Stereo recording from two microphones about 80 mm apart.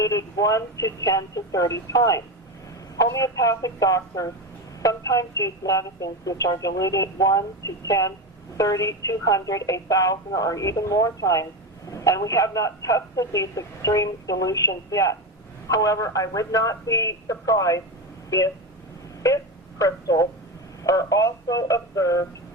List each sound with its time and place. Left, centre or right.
0.0 s a woman's voice: left
19.8 s a woman's voice: left